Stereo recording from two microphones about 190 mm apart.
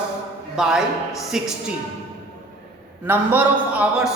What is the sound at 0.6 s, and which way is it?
Speech, centre (ahead or behind).